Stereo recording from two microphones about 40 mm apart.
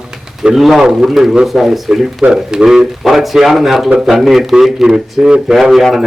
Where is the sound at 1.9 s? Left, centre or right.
Centre.